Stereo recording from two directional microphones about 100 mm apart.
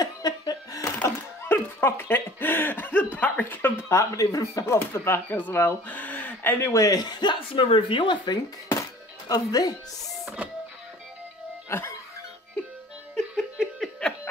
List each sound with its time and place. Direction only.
0.0 s laughter: 40° left (ahead or behind)
1.0 s speech: 25° left (ahead or behind); by 7.6 s 50° left (ahead or behind)
7.6 s a woman's voice: 60° left (ahead or behind)
9.3 s speech: 40° left (ahead or behind)
11.7 s speech: 25° left (ahead or behind)
13.1 s laughter: centre (ahead or behind)